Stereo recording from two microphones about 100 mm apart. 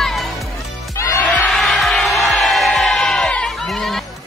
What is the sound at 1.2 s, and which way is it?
Crowd, 15° left (ahead or behind).